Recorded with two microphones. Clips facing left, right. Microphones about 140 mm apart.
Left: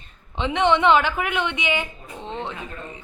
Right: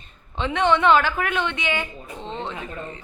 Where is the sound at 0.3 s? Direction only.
20° left (ahead or behind).